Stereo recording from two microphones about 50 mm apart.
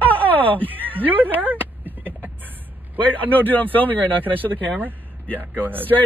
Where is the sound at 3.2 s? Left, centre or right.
Left.